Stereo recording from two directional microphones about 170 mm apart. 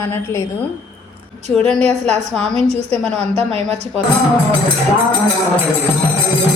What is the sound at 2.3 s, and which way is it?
Speech, 5° left (ahead or behind).